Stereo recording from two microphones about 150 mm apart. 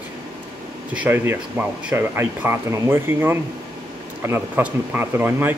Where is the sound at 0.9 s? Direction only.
15° right (ahead or behind).